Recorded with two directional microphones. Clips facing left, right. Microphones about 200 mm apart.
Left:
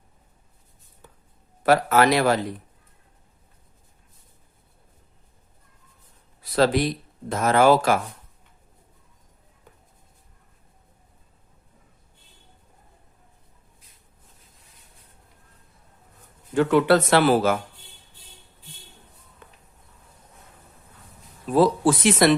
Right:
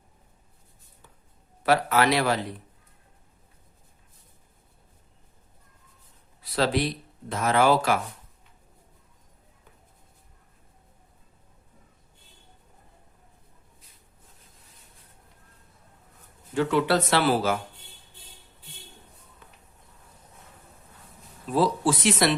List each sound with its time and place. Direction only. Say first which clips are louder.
1.6 s speech: left 4 dB; 45° left (ahead or behind)
6.4 s speech: left 5 dB; 45° left (ahead or behind)
16.6 s speech: left 5 dB; 55° left (ahead or behind)
21.5 s speech: left 5 dB; 50° left (ahead or behind)